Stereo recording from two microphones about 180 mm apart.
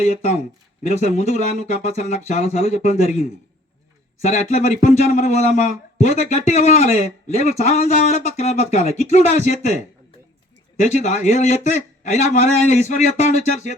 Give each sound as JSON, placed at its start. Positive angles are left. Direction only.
{"t": 0.0, "sound": "speech", "side_deg": 45}